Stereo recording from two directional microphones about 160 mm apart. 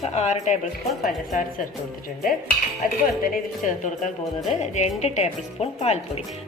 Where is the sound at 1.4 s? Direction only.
60° left (ahead or behind).